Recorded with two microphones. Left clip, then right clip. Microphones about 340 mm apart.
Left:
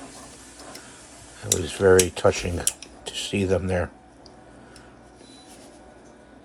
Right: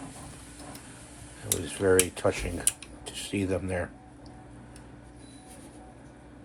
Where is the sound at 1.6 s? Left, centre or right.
Left.